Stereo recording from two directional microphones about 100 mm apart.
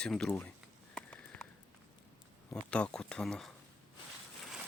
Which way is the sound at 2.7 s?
10° left (ahead or behind).